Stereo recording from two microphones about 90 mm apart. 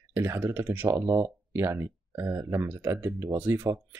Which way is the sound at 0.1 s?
25° right (ahead or behind).